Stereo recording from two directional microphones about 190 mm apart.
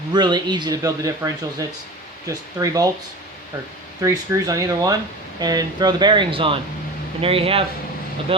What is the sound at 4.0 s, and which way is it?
Speech, 15° right (ahead or behind).